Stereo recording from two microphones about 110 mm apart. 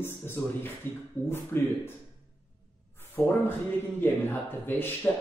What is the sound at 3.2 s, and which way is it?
Speech, 25° left (ahead or behind).